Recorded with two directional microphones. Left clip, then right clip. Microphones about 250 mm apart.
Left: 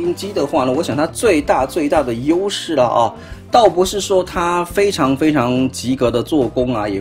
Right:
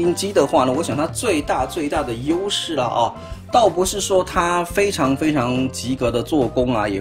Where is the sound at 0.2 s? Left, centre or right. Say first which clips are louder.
Right 2 dB; centre.